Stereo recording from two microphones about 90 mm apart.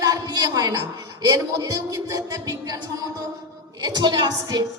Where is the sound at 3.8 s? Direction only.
55° right (ahead or behind).